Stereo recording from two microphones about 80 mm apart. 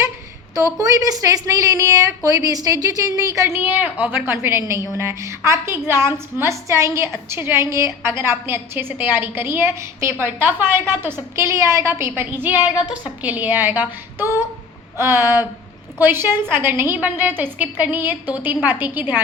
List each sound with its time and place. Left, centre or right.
0.5 s a woman's voice: right
3.4 s a woman's voice: right